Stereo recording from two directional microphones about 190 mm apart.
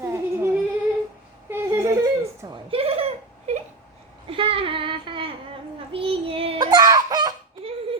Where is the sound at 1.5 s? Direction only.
15° right (ahead or behind).